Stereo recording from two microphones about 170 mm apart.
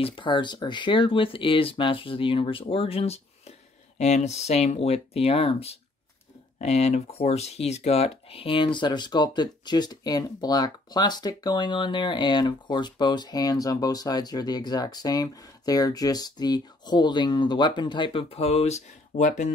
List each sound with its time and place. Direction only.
0.0 s speech: 30° left (ahead or behind); by 19.5 s 45° left (ahead or behind)